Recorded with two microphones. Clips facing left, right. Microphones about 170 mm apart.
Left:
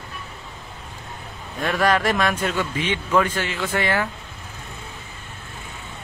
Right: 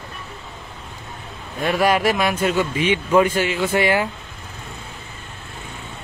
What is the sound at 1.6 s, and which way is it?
A man's voice, 15° right (ahead or behind).